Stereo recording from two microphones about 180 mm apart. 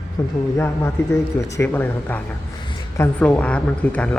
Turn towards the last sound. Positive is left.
turn(degrees=5)  # may be behind; listen again after turning